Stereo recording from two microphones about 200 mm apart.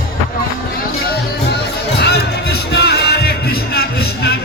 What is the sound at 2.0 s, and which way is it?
Music, 55° left (ahead or behind).